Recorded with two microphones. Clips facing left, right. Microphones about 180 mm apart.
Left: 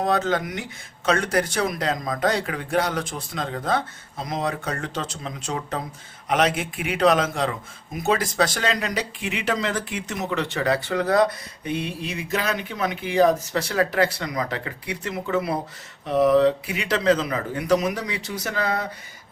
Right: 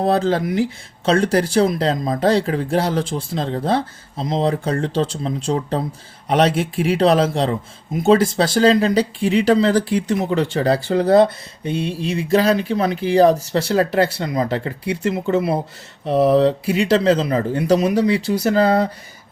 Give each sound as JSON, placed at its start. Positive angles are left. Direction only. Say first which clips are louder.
{"t": 0.0, "sound": "speech", "louder": "right 5 dB", "side_deg": -30}